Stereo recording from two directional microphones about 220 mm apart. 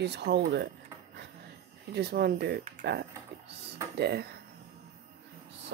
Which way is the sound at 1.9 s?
45° right (ahead or behind).